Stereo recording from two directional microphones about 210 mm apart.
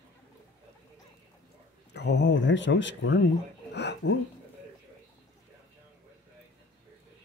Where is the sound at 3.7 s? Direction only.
55° left (ahead or behind).